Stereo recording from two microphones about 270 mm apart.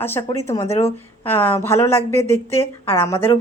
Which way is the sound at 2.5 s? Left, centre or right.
Centre.